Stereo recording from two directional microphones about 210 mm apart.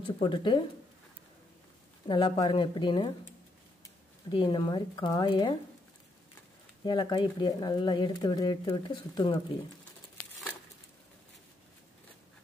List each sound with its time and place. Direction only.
0.2 s speech: 20° left (ahead or behind)
2.0 s speech: 20° left (ahead or behind)
6.8 s speech: 20° left (ahead or behind)